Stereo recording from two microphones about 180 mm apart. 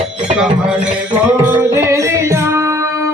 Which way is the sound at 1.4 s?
10° right (ahead or behind).